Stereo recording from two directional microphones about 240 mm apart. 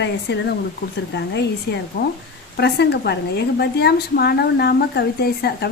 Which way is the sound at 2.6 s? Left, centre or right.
Left.